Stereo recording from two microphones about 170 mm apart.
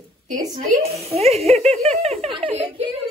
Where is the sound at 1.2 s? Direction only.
35° right (ahead or behind).